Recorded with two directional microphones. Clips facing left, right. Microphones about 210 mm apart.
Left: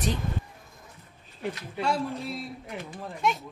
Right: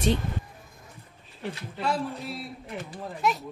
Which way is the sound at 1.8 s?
Centre (ahead or behind).